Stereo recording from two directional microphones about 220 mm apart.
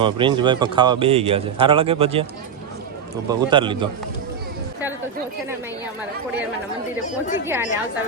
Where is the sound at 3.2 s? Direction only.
20° right (ahead or behind).